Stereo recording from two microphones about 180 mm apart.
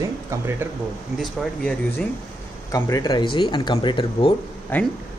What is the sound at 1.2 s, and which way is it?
Speech, 5° left (ahead or behind).